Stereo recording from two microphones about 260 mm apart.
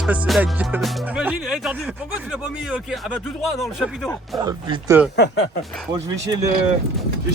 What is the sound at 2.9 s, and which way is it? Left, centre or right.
Speech, centre.